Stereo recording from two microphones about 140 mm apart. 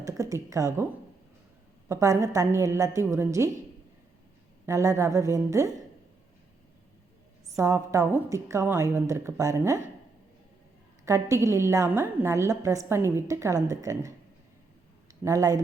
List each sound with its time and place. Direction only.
0.0 s a woman's voice: 25° right (ahead or behind)
1.9 s a woman's voice: 20° right (ahead or behind)
4.6 s a woman's voice: 20° right (ahead or behind)
7.5 s a woman's voice: 20° right (ahead or behind)
11.0 s a woman's voice: 20° right (ahead or behind)
15.2 s a woman's voice: 20° right (ahead or behind)